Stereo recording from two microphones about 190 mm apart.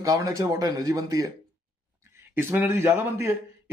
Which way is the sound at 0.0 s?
20° right (ahead or behind).